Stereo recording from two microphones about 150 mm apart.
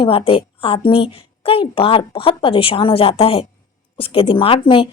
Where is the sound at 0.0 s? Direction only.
40° left (ahead or behind).